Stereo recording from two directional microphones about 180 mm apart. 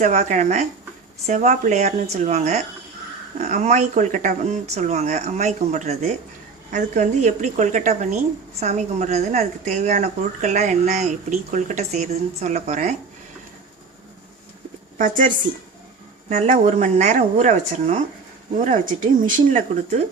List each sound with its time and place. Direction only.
0.0 s a woman's voice: 40° right (ahead or behind)
14.9 s speech: 45° right (ahead or behind)
16.3 s a woman's voice: 40° right (ahead or behind)